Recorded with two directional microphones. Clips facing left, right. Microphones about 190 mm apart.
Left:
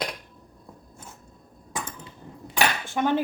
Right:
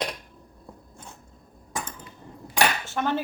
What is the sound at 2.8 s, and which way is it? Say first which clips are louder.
Cutlery: left 3 dB; 15° left (ahead or behind).